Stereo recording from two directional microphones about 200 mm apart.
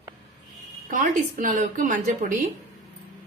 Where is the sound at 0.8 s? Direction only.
40° right (ahead or behind).